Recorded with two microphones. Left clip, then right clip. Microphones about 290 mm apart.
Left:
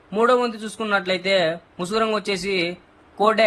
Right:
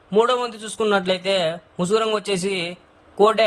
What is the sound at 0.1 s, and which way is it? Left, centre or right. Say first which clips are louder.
A man's voice: even; right.